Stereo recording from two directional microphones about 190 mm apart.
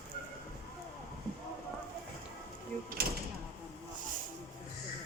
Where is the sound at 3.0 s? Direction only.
55° right (ahead or behind).